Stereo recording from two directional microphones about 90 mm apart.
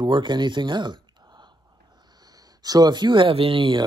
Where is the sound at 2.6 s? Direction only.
45° right (ahead or behind); by 3.8 s 70° right (ahead or behind).